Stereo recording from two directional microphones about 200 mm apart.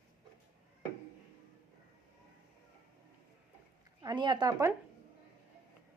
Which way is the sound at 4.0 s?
20° right (ahead or behind).